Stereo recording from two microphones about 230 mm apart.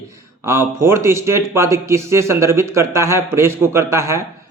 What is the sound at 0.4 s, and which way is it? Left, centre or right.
A man's voice, centre.